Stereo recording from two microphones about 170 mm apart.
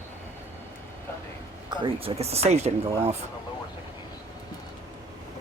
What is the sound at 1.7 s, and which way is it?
Speech, 30° right (ahead or behind).